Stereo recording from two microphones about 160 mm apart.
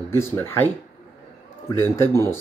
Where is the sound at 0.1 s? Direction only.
15° left (ahead or behind).